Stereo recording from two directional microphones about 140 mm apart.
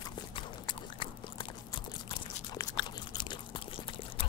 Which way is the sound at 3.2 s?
35° left (ahead or behind).